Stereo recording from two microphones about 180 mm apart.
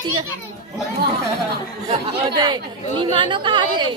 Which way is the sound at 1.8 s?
25° right (ahead or behind).